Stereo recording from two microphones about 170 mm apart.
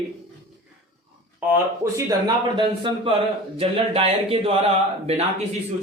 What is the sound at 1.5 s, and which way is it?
Speech, 15° right (ahead or behind).